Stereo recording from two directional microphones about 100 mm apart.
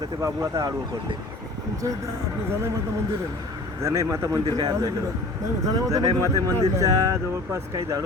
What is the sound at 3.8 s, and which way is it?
A man's voice, 30° right (ahead or behind).